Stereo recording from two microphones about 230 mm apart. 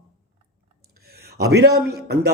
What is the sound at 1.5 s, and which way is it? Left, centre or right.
Speech, right.